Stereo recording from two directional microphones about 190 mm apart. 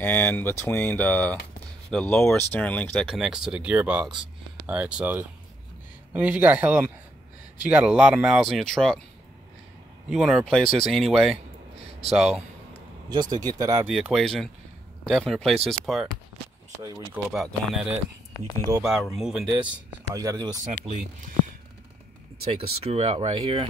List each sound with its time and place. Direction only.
0.0 s speech: 10° left (ahead or behind)
10.0 s speech: 5° right (ahead or behind)
13.1 s speech: 20° right (ahead or behind)
13.8 s speech: 5° right (ahead or behind)
17.3 s speech: 5° right (ahead or behind)
18.7 s speech: 15° right (ahead or behind)
19.1 s speech: 5° right (ahead or behind)
20.2 s speech: 20° right (ahead or behind)
20.8 s speech: 35° right (ahead or behind)
22.4 s speech: 30° right (ahead or behind)